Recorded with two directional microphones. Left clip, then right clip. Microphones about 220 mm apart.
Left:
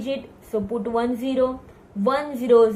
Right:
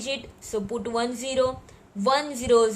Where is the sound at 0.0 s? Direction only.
45° right (ahead or behind).